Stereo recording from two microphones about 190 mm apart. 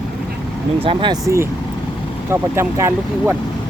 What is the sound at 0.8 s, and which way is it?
Speech, 30° right (ahead or behind).